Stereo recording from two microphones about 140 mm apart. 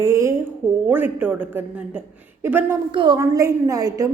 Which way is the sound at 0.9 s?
15° right (ahead or behind).